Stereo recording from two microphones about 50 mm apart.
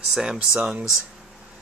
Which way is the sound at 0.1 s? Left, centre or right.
Centre.